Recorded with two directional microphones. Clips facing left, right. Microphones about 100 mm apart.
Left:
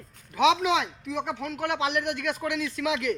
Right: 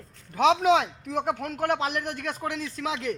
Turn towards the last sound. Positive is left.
turn(degrees=-30)  # may be behind; listen again after turning